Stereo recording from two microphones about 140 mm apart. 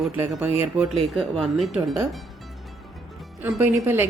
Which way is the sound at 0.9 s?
Centre (ahead or behind).